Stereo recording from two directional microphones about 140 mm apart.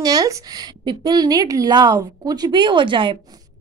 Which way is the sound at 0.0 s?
25° right (ahead or behind).